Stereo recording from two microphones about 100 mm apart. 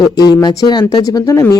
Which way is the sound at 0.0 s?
40° left (ahead or behind).